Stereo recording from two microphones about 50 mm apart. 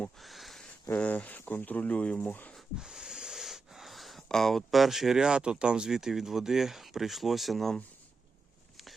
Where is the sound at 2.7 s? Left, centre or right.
Centre.